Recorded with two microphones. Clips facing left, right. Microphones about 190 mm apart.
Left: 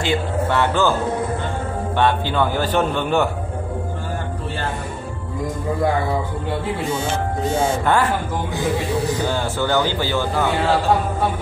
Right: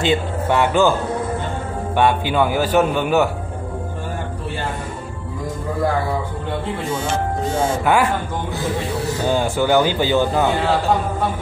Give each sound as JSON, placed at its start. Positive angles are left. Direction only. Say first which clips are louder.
{"t": 0.0, "sound": "a man's voice", "louder": "right 2 dB", "side_deg": -20}
{"t": 2.0, "sound": "a man's voice", "louder": "right 2 dB", "side_deg": -15}
{"t": 7.8, "sound": "a man's voice", "louder": "right 4 dB", "side_deg": -10}
{"t": 9.3, "sound": "a man's voice", "louder": "right 4 dB", "side_deg": -15}